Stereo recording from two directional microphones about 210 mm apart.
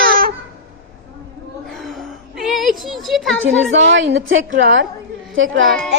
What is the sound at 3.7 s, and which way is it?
A woman's voice, 60° right (ahead or behind).